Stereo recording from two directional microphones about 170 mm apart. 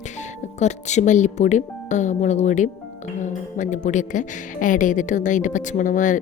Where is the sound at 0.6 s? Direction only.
40° left (ahead or behind).